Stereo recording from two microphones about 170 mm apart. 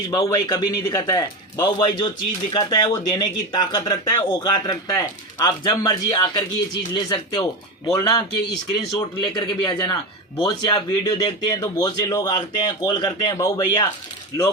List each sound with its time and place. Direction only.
0.1 s a man's voice: 25° left (ahead or behind)